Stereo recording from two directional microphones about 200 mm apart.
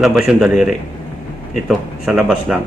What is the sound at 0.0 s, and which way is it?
Speech, centre (ahead or behind).